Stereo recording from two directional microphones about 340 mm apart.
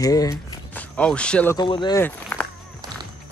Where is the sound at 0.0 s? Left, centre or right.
Centre.